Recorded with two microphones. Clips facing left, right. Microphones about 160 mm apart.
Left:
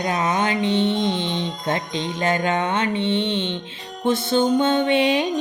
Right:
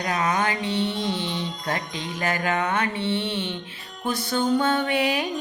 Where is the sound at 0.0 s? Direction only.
20° left (ahead or behind).